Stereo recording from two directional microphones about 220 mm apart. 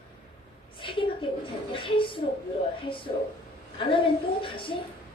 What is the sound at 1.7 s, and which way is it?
A woman's voice, 25° left (ahead or behind).